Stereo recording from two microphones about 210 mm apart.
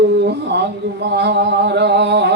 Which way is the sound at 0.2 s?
50° right (ahead or behind).